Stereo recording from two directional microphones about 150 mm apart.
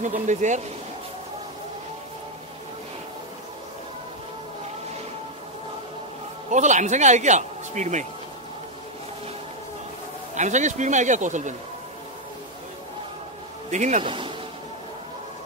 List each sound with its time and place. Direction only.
0.0 s speech: 55° right (ahead or behind)
6.5 s speech: 55° right (ahead or behind)
10.3 s speech: 55° right (ahead or behind)
13.7 s speech: 55° right (ahead or behind)
14.0 s speech: 35° right (ahead or behind)